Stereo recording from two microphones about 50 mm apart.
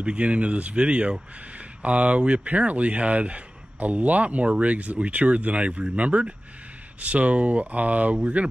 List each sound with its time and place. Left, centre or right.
0.0 s speech: right